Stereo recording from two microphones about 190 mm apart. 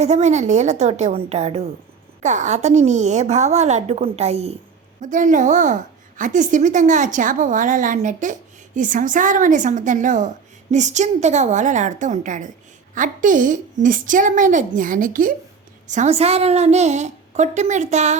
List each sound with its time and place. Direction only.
0.0 s a woman's voice: 35° right (ahead or behind)